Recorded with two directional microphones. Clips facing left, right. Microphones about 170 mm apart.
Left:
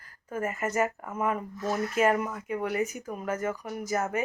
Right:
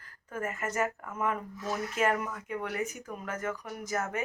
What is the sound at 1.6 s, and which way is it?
Speech, 45° left (ahead or behind).